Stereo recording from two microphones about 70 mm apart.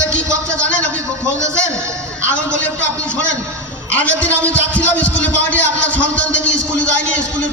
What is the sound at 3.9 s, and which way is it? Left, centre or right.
A man's voice, left.